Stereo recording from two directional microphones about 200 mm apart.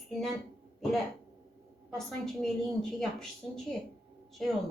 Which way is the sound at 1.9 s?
Centre (ahead or behind).